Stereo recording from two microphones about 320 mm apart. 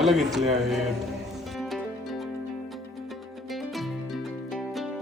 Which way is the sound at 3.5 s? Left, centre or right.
Centre.